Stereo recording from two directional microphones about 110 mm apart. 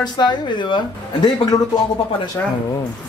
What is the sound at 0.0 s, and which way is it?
Speech, 40° left (ahead or behind).